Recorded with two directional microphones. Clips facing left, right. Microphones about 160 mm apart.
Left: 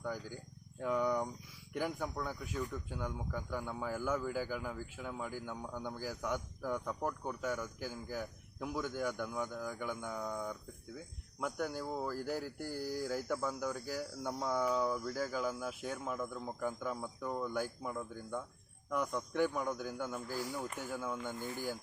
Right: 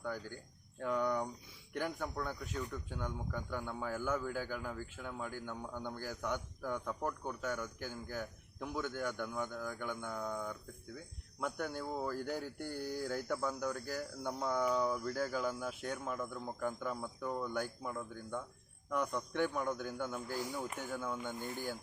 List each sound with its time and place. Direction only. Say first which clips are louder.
0.0 s speech: left 1 dB; 10° left (ahead or behind)
21.3 s speech: even; 15° right (ahead or behind)